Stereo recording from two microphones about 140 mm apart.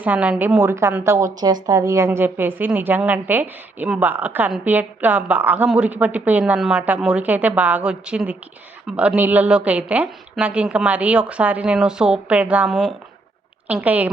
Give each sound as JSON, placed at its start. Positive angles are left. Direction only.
{"t": 0.0, "sound": "a woman's voice", "side_deg": -10}